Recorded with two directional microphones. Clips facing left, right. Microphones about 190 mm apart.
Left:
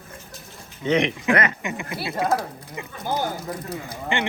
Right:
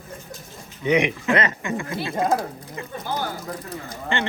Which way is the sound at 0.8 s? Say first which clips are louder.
Right 1 dB; 15° right (ahead or behind).